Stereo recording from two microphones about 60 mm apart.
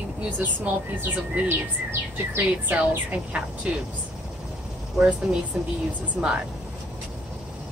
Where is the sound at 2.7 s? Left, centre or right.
Centre.